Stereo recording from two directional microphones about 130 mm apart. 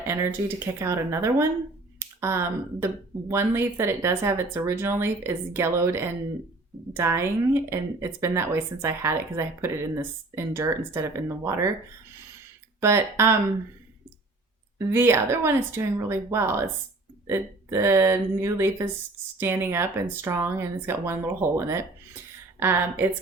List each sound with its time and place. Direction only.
0.1 s speech: 20° right (ahead or behind)
12.8 s speech: 20° right (ahead or behind)
14.8 s a woman's voice: 20° right (ahead or behind)